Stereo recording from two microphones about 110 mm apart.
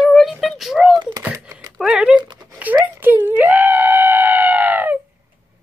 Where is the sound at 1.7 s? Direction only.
5° right (ahead or behind).